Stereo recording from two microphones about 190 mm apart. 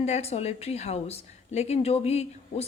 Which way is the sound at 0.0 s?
35° left (ahead or behind).